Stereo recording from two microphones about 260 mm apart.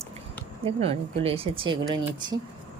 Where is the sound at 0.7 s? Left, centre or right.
Right.